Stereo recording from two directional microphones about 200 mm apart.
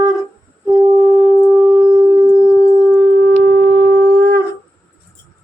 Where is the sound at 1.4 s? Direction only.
25° right (ahead or behind).